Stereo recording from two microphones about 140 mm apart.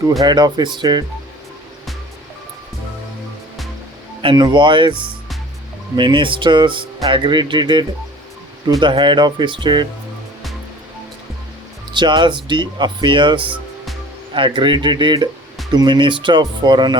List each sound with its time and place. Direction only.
0.2 s speech: 30° right (ahead or behind)
4.2 s speech: 35° right (ahead or behind)
11.9 s speech: 35° right (ahead or behind)